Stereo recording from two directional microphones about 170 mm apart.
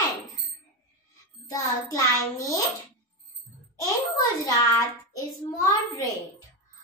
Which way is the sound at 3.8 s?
20° left (ahead or behind).